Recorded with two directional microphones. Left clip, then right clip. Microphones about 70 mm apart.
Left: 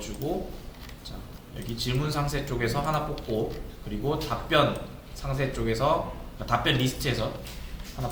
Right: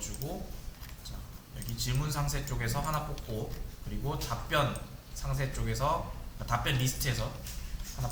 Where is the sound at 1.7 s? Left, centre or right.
Right.